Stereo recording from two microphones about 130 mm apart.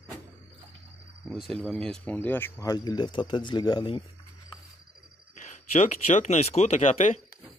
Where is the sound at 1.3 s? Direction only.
Centre (ahead or behind); by 2.6 s 15° left (ahead or behind).